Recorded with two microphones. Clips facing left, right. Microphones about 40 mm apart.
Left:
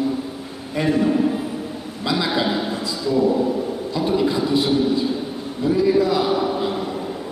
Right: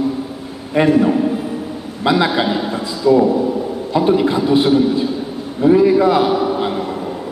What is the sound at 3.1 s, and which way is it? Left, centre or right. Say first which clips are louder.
Speech: right 9 dB; right.